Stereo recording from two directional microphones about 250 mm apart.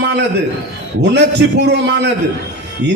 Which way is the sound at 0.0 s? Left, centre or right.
Right.